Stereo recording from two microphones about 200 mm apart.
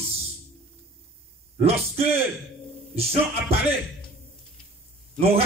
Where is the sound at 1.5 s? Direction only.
30° right (ahead or behind).